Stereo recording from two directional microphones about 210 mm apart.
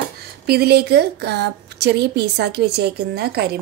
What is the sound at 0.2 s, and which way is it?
Speech, 50° right (ahead or behind).